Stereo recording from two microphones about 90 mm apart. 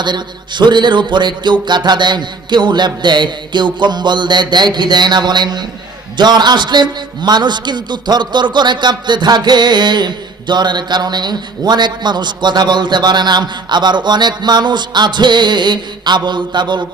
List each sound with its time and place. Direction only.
0.0 s a man's voice: 55° right (ahead or behind)